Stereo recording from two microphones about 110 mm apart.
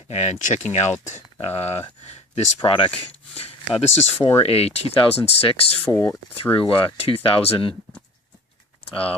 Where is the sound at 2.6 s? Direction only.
55° left (ahead or behind).